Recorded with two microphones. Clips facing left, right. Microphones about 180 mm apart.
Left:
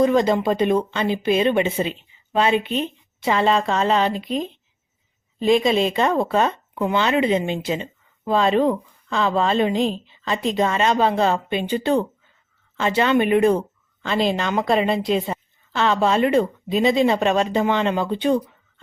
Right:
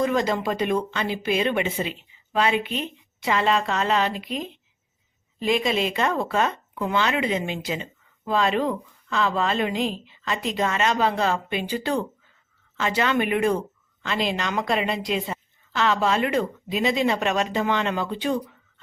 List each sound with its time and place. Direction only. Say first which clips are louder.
0.0 s speech: left 6 dB; 25° left (ahead or behind)